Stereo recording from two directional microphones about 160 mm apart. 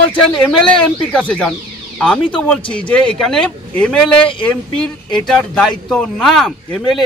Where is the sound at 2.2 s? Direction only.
30° left (ahead or behind).